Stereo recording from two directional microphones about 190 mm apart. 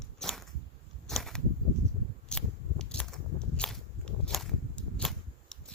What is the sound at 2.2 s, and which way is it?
Biting, 5° left (ahead or behind).